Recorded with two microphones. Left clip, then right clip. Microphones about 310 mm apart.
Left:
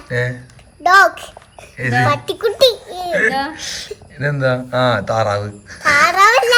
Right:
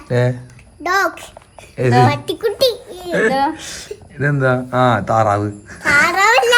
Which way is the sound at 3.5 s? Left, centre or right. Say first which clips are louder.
Left 3 dB; centre.